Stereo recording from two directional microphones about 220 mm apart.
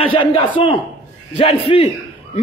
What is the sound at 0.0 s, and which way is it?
A man's voice, 25° left (ahead or behind).